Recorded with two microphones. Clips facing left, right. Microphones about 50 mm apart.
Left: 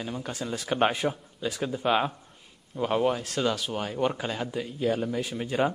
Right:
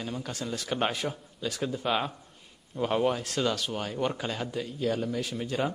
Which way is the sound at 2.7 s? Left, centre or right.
Centre.